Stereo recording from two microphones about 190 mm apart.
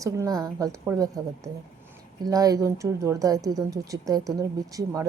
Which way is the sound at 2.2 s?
20° right (ahead or behind).